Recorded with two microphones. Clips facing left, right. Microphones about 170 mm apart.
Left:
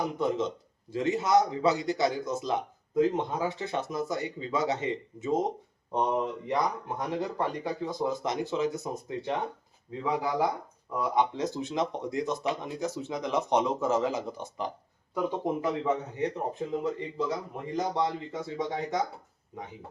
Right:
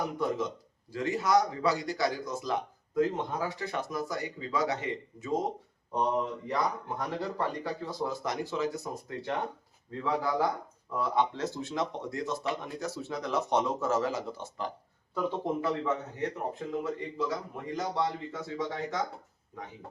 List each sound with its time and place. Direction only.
0.2 s a man's voice: 25° left (ahead or behind)
17.7 s speech: 20° left (ahead or behind)